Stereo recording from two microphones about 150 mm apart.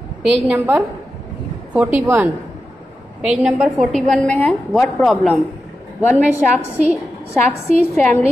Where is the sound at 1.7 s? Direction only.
10° right (ahead or behind).